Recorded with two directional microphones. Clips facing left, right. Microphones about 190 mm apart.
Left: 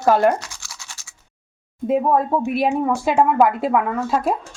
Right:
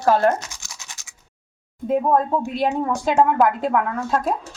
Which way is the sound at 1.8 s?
5° left (ahead or behind).